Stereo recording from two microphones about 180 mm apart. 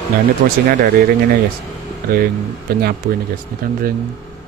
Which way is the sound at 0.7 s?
55° right (ahead or behind).